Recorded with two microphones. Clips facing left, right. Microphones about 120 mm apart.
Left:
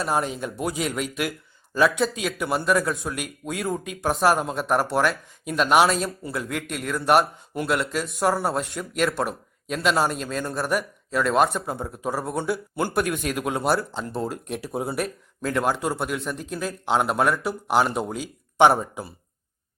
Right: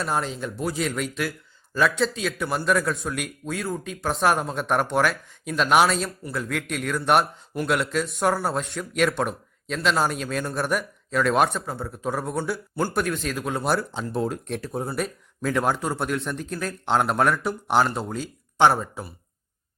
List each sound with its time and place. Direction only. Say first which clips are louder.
0.0 s speech: left 2 dB; 10° left (ahead or behind)
11.6 s a man's voice: left 2 dB; 20° left (ahead or behind)
12.0 s speech: left 1 dB; 5° left (ahead or behind)
13.7 s speech: even; centre (ahead or behind); by 19.1 s 20° left (ahead or behind)